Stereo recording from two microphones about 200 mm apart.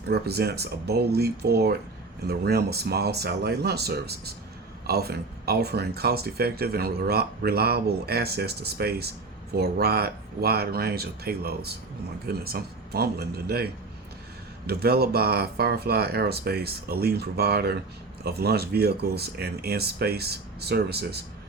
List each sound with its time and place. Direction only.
0.1 s speech: 55° right (ahead or behind)
14.7 s speech: 50° right (ahead or behind)